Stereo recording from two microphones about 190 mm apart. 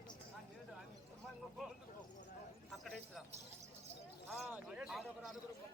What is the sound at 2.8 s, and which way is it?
Speech, centre (ahead or behind).